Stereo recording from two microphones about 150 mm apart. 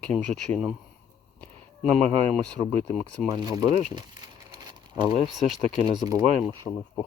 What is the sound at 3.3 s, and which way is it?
Speech, 25° right (ahead or behind).